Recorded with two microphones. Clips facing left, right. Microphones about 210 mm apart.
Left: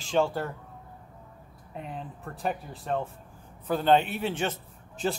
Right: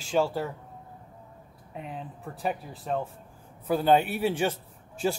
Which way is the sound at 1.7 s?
Centre (ahead or behind).